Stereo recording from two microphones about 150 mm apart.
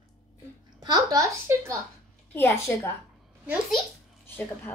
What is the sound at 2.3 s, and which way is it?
Speech, 15° left (ahead or behind).